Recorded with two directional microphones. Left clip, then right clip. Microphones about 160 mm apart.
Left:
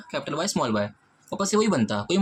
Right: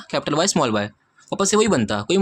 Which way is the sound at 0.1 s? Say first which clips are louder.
Right 8 dB; 55° right (ahead or behind).